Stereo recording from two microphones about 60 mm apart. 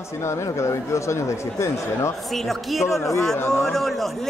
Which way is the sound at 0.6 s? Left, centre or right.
Left.